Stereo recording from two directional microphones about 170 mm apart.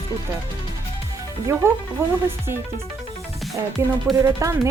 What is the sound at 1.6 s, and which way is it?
Speech, 15° right (ahead or behind).